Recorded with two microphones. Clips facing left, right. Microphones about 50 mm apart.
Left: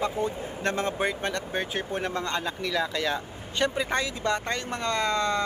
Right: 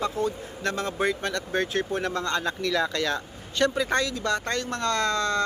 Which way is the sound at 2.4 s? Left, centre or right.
Centre.